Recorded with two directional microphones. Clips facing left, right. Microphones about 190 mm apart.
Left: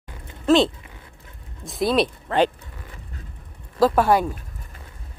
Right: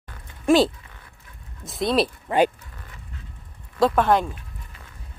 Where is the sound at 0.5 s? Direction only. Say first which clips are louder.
Even; 10° right (ahead or behind).